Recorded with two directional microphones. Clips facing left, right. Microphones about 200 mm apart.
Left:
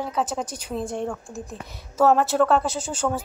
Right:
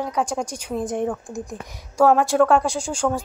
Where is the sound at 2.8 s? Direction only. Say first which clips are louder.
Right 3 dB; 10° right (ahead or behind).